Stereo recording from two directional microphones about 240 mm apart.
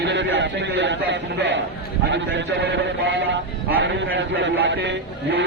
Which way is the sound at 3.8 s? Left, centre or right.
Right.